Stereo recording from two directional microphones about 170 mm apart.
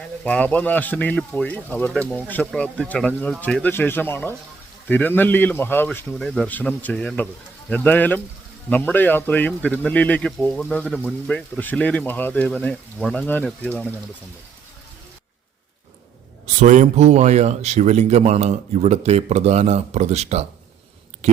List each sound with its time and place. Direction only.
0.3 s a man's voice: 10° left (ahead or behind)
6.1 s a man's voice: centre (ahead or behind)
13.2 s a man's voice: 10° left (ahead or behind)
16.6 s speech: 45° right (ahead or behind)
21.2 s a sound: 40° right (ahead or behind)